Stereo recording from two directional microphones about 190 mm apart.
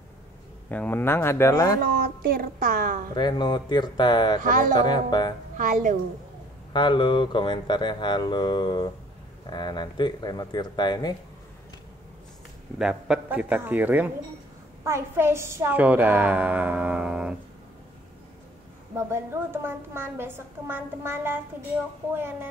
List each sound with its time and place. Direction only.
0.7 s speech: 10° left (ahead or behind)
1.8 s a woman's voice: 50° right (ahead or behind)
3.2 s speech: 25° left (ahead or behind)
4.4 s a woman's voice: 45° right (ahead or behind)
4.7 s speech: 20° left (ahead or behind)
5.6 s a woman's voice: 40° right (ahead or behind)
6.7 s speech: 25° left (ahead or behind)
12.7 s a woman's voice: 5° right (ahead or behind)
18.9 s a woman's voice: 15° right (ahead or behind)